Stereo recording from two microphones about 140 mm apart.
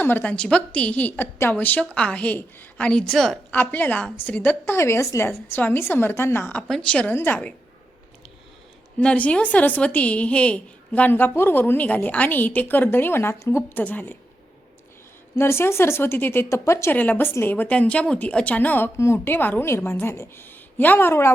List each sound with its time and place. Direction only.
0.0 s speech: 15° left (ahead or behind)
9.0 s speech: 10° left (ahead or behind)
15.4 s speech: 15° left (ahead or behind)